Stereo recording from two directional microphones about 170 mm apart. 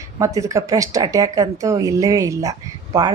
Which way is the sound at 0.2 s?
20° right (ahead or behind).